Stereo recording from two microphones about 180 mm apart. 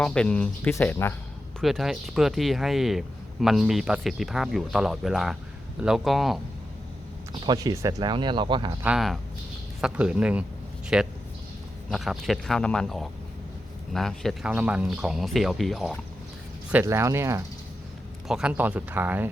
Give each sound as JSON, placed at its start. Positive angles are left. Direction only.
{"t": 0.0, "sound": "speech", "side_deg": 5}
{"t": 1.6, "sound": "speech", "side_deg": 0}
{"t": 7.3, "sound": "speech", "side_deg": -25}
{"t": 8.8, "sound": "speech", "side_deg": -5}
{"t": 16.7, "sound": "speech", "side_deg": -15}
{"t": 18.3, "sound": "speech", "side_deg": -5}